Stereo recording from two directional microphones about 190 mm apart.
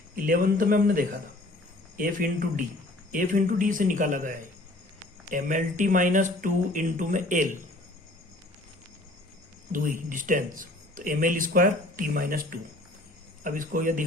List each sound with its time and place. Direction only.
0.3 s speech: 50° right (ahead or behind)
9.7 s speech: 45° right (ahead or behind)